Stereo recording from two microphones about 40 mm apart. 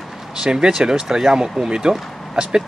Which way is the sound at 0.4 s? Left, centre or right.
Centre.